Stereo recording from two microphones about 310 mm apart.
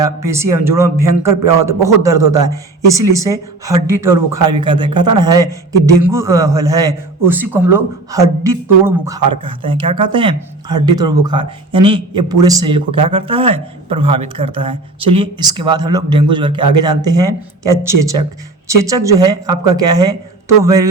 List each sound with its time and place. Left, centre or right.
0.0 s speech: centre